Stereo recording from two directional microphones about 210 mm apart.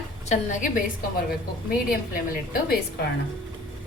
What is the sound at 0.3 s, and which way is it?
Speech, 35° left (ahead or behind).